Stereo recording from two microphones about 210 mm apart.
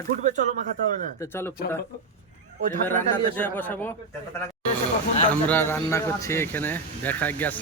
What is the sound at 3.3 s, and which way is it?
Speech, 10° left (ahead or behind).